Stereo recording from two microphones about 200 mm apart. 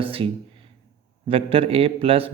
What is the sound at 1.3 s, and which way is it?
Speech, 30° right (ahead or behind).